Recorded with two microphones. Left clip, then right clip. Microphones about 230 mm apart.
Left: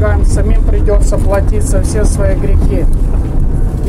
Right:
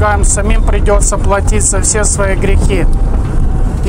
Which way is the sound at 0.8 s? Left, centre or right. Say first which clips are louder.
Right 2 dB; right.